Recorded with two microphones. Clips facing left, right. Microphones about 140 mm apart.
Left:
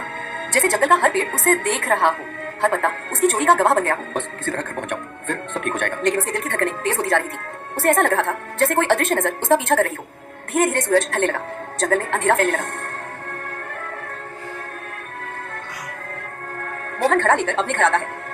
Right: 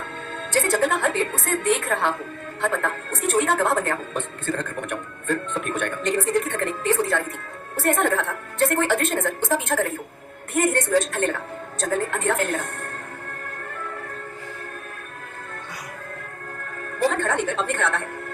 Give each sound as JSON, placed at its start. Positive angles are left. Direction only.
{"t": 0.5, "sound": "a woman's voice", "side_deg": 80}
{"t": 10.5, "sound": "a woman's voice", "side_deg": 90}
{"t": 17.0, "sound": "a woman's voice", "side_deg": 75}